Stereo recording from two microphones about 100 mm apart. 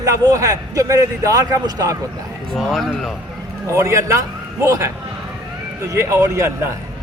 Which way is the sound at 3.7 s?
30° right (ahead or behind).